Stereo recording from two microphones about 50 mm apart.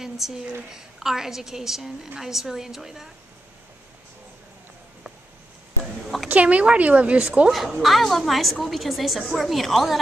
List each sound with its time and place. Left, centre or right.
0.0 s a woman's voice: centre
6.2 s speech: right
7.5 s a woman's voice: centre